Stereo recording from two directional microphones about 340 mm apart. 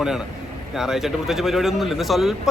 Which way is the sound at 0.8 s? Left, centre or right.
Centre.